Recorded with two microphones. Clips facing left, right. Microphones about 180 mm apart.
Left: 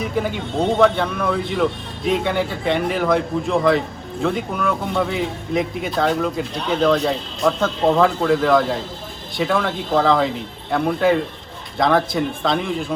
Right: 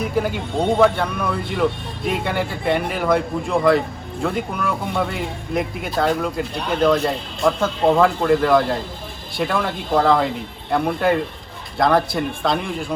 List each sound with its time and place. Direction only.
0.0 s speech: 5° right (ahead or behind)